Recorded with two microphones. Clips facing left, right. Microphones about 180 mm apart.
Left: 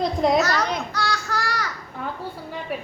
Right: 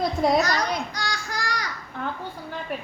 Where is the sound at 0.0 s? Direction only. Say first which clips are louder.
Left 1 dB; 5° right (ahead or behind).